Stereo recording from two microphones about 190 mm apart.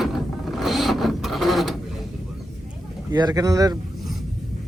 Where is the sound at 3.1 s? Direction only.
20° right (ahead or behind).